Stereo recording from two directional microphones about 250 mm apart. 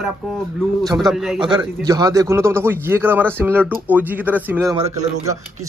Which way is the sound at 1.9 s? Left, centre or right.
Centre.